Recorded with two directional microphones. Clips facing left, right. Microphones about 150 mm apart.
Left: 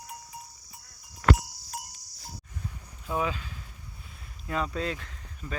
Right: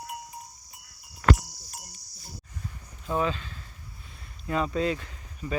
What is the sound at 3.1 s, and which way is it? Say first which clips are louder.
Speech: right 2 dB; 5° left (ahead or behind).